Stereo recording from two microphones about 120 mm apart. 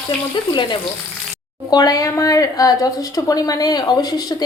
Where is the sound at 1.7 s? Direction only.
30° left (ahead or behind).